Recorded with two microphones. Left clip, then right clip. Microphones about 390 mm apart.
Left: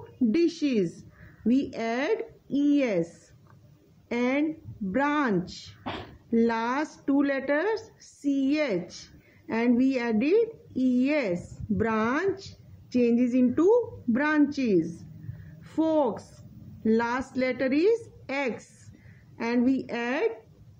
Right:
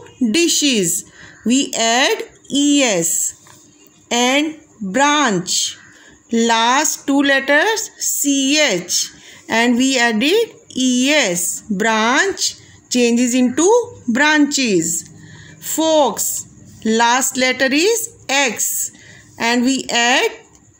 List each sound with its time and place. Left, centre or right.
0.3 s speech: left
4.1 s speech: left